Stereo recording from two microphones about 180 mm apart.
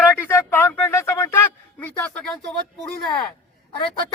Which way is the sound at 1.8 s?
10° left (ahead or behind).